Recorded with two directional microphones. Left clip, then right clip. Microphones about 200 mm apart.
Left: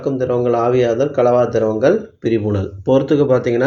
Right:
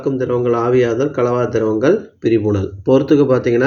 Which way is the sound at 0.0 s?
20° right (ahead or behind).